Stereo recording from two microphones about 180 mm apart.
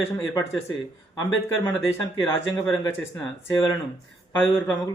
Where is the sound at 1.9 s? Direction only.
15° left (ahead or behind).